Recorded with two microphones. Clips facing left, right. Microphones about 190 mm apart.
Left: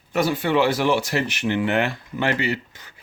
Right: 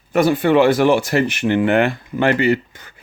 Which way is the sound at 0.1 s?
55° right (ahead or behind).